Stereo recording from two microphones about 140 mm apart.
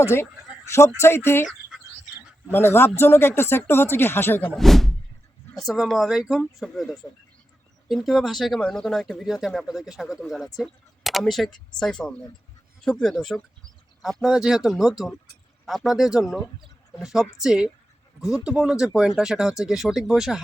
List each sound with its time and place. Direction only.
0.7 s speech: 20° left (ahead or behind)
2.5 s speech: 15° left (ahead or behind)
4.5 s speech: centre (ahead or behind)